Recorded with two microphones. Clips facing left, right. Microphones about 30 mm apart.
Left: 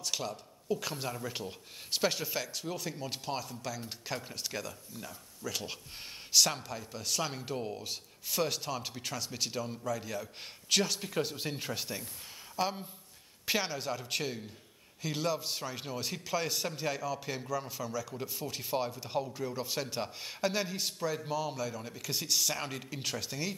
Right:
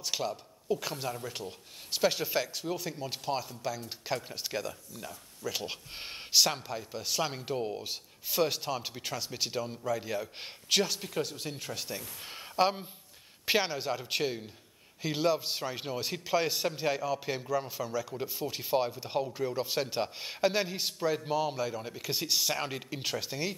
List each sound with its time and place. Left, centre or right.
0.0 s speech: centre
5.9 s speech: right
6.3 s speech: centre
12.2 s speech: right; by 23.5 s centre